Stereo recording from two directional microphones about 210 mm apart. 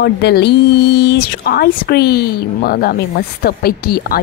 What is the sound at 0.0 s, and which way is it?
A woman's voice, 50° left (ahead or behind).